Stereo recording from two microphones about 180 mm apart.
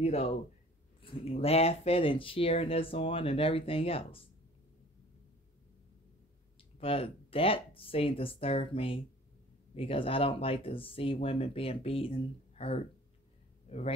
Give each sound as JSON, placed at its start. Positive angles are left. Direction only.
{"t": 0.0, "sound": "speech", "side_deg": 35}
{"t": 6.8, "sound": "speech", "side_deg": 30}